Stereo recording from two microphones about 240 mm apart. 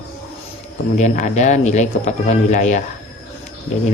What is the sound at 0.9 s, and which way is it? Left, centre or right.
Speech, left.